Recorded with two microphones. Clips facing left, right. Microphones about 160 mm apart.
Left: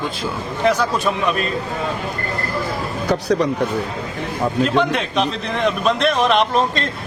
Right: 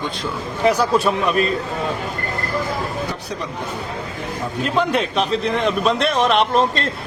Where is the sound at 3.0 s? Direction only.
90° left.